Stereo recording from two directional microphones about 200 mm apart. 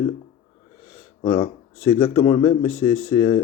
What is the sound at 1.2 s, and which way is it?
Speech, 25° left (ahead or behind).